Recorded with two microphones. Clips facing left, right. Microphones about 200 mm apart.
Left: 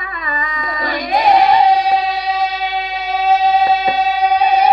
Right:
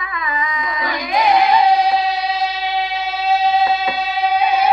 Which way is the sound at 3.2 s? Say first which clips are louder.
Left 3 dB; 45° left (ahead or behind).